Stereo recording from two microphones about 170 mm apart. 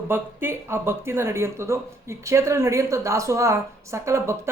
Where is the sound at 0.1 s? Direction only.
15° right (ahead or behind).